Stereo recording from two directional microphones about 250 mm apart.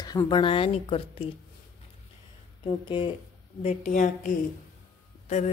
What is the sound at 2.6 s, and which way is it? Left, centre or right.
A woman's voice, centre.